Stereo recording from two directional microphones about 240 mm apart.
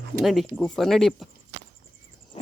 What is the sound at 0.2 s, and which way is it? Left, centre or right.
Speech, centre.